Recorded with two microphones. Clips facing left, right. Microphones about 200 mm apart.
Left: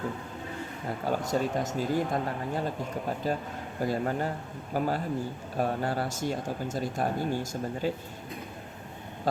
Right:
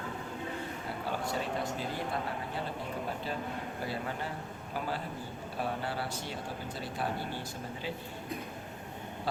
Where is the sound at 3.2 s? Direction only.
45° left (ahead or behind).